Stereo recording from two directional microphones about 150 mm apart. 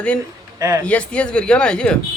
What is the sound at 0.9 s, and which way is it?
Speech, 10° left (ahead or behind).